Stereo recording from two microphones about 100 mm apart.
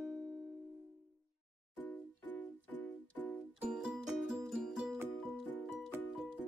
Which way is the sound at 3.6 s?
5° right (ahead or behind).